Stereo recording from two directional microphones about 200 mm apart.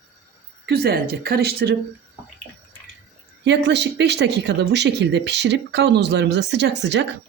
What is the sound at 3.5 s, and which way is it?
Speech, 60° right (ahead or behind).